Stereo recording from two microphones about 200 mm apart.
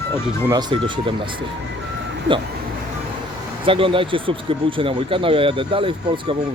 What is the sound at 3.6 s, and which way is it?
Speech, 25° right (ahead or behind).